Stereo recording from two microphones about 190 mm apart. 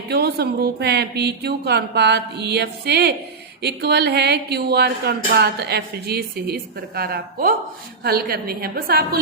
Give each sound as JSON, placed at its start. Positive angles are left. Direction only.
{"t": 0.1, "sound": "a woman's voice", "side_deg": -55}